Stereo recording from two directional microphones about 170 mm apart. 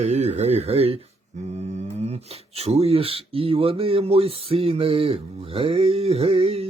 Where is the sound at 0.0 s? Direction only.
40° right (ahead or behind).